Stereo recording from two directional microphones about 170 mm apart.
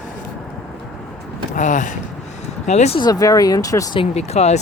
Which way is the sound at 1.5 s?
45° left (ahead or behind).